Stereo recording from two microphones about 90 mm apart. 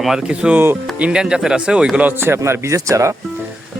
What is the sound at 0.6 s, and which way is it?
Speech, 25° right (ahead or behind).